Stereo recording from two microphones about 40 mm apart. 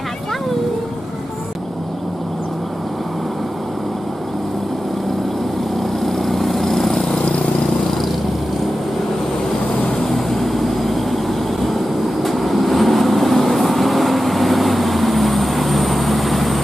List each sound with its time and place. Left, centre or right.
6.0 s lawn mower: centre
10.0 s vehicle: centre
12.2 s vehicle: centre